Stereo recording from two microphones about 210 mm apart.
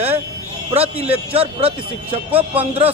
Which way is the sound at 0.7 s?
30° right (ahead or behind).